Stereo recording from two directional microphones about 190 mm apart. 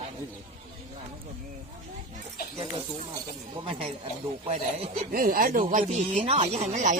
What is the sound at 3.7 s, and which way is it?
Speech, 30° right (ahead or behind).